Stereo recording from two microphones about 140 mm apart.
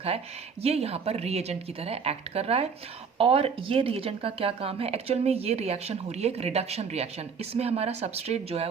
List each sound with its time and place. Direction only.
0.6 s speech: 50° right (ahead or behind)